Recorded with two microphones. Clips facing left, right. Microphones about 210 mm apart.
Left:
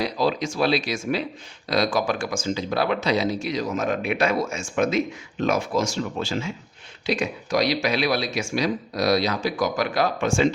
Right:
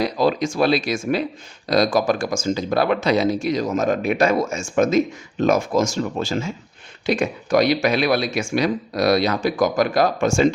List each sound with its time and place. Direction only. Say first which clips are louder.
0.0 s speech: right 4 dB; 50° right (ahead or behind)